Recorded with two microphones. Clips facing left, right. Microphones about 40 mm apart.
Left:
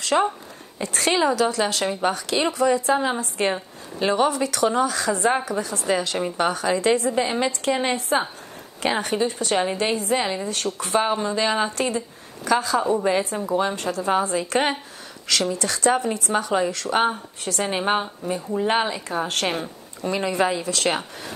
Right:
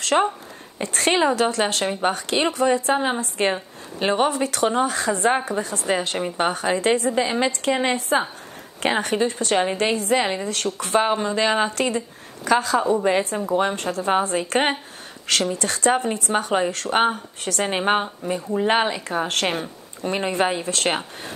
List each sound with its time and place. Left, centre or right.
0.1 s speech: centre
0.7 s speech: right
1.9 s a woman's voice: right
20.0 s speech: right